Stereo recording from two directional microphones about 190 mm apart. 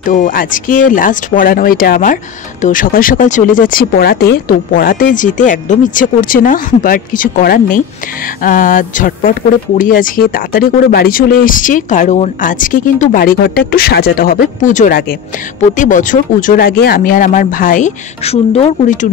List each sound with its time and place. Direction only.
0.0 s speech: 45° left (ahead or behind)
15.7 s speech: 40° left (ahead or behind)